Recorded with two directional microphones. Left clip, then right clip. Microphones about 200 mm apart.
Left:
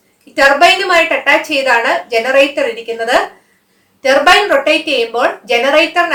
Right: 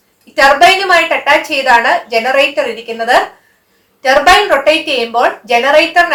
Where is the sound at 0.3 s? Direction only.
20° left (ahead or behind).